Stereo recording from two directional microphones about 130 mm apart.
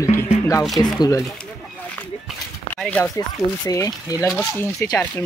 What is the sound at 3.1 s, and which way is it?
Speech, 25° left (ahead or behind).